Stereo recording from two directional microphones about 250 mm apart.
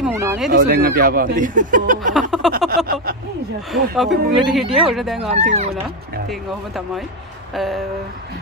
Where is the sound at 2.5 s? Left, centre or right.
Right.